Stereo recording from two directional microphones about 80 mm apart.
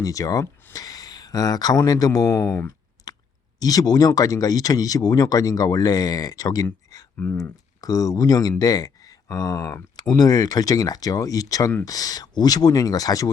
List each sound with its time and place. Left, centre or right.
0.0 s speech: left
2.6 s clicking: left
3.6 s speech: left
7.2 s speech: left
7.8 s speech: left
10.1 s speech: left